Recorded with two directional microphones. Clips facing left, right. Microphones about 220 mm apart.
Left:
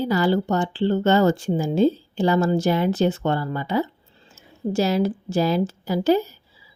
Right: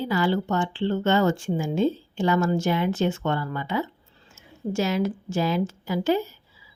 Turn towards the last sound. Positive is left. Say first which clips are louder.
# left 4 dB
turn(degrees=40)  # may be behind; listen again after turning